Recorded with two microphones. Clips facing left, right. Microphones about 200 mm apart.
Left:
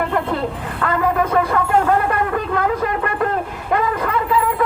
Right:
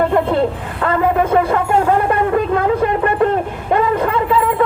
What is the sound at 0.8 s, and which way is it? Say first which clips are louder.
Speech: right 3 dB; 25° right (ahead or behind).